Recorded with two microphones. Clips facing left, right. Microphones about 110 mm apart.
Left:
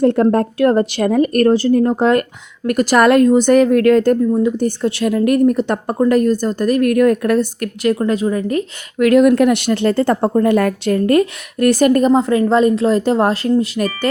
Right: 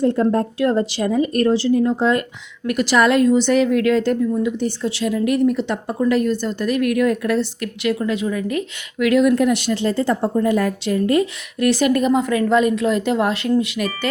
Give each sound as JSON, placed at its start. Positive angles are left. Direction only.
{"t": 0.0, "sound": "speech", "side_deg": 60}
{"t": 2.6, "sound": "a woman's voice", "side_deg": 45}